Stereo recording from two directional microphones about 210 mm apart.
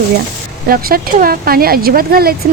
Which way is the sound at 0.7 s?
45° right (ahead or behind).